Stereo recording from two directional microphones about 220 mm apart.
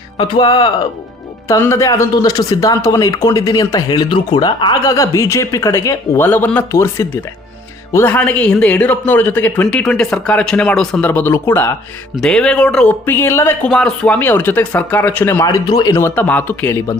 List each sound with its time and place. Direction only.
0.2 s speech: 20° left (ahead or behind)